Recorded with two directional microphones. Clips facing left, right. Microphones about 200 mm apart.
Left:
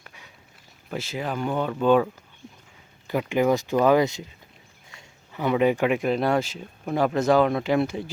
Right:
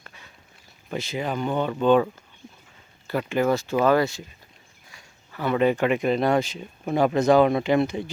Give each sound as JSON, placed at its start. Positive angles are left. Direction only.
{"t": 0.0, "sound": "a sound", "side_deg": 10}
{"t": 0.9, "sound": "speech", "side_deg": 5}
{"t": 3.1, "sound": "speech", "side_deg": 15}